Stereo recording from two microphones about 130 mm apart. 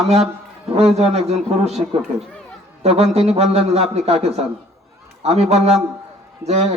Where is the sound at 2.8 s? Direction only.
55° right (ahead or behind).